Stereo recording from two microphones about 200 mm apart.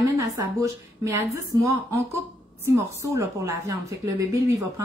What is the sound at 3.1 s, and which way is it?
A woman's voice, 15° right (ahead or behind).